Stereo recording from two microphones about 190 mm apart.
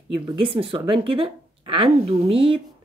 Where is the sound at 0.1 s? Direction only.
25° right (ahead or behind).